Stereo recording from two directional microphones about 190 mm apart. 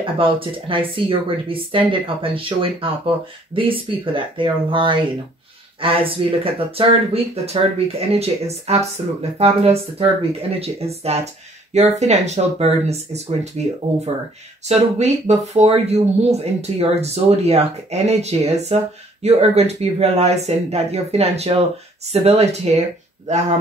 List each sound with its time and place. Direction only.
0.0 s speech: 30° right (ahead or behind)